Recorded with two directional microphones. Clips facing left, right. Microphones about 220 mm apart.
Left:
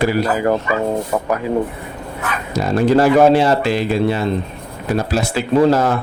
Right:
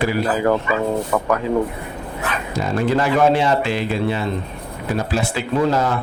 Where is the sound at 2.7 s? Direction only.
40° left (ahead or behind).